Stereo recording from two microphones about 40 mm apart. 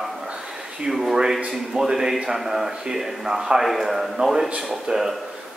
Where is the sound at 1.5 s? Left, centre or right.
Centre.